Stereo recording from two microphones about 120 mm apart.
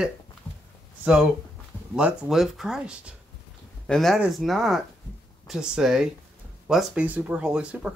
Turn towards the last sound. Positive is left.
turn(degrees=-10)  # may be behind; listen again after turning